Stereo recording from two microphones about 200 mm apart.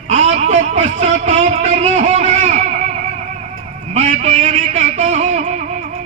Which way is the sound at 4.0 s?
35° right (ahead or behind).